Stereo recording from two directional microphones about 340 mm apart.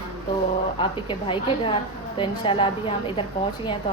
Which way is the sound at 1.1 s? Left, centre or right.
Centre.